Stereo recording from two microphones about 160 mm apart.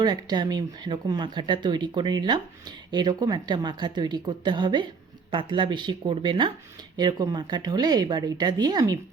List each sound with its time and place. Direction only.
0.0 s speech: 25° right (ahead or behind)